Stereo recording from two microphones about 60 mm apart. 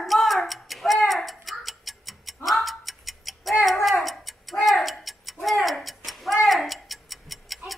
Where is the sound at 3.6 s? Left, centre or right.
Centre.